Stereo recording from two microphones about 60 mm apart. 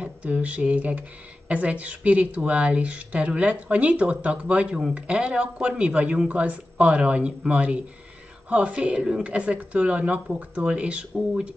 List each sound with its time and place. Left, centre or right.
0.0 s speech: right